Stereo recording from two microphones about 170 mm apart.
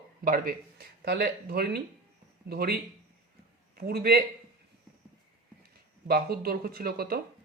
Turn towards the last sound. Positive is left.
turn(degrees=-65)  # may be behind; listen again after turning